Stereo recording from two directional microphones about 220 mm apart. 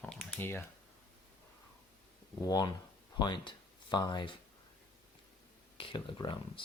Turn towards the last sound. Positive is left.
turn(degrees=20)  # may be behind; listen again after turning